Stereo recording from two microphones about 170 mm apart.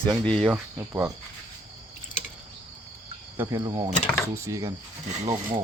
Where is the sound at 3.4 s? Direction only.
20° right (ahead or behind).